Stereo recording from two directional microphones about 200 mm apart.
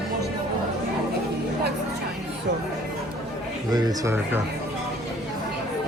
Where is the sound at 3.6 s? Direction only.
20° right (ahead or behind).